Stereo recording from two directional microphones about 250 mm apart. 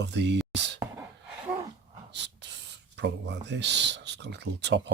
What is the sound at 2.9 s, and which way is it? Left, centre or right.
Speech, right.